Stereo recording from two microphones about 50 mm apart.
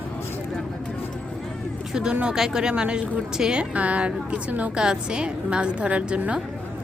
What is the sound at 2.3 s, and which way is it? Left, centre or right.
Speech, centre.